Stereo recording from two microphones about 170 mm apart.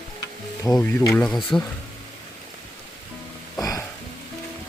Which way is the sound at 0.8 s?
15° left (ahead or behind).